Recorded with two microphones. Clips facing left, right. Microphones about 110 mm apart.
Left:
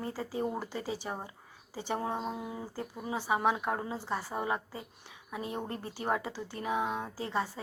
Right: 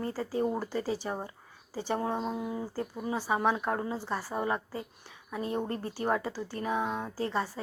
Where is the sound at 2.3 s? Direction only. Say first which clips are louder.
Right 5 dB; 25° right (ahead or behind).